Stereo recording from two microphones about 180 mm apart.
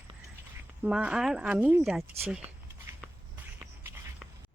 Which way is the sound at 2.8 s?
10° right (ahead or behind).